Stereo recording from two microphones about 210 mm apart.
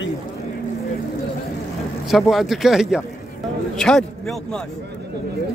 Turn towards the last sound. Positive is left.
turn(degrees=5)  # may be behind; listen again after turning